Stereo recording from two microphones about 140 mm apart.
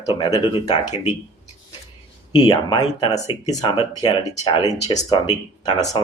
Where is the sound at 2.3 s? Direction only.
35° left (ahead or behind).